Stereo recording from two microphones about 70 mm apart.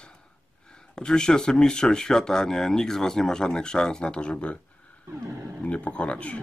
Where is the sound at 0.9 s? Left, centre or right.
Centre.